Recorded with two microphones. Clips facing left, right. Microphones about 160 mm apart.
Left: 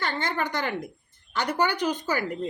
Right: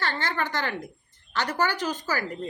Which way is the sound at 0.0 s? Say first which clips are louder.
Left 1 dB; 15° left (ahead or behind).